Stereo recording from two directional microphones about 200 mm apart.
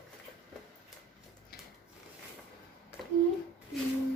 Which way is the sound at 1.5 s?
50° left (ahead or behind).